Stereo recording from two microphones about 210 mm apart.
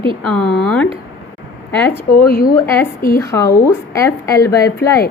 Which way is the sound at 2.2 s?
45° left (ahead or behind).